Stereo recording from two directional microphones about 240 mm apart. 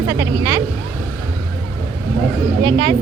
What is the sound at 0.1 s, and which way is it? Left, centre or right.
Speech, centre.